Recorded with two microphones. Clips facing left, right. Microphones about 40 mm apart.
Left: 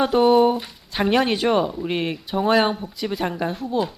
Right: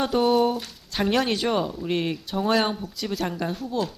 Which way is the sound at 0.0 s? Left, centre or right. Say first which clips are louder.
Left 5 dB; centre.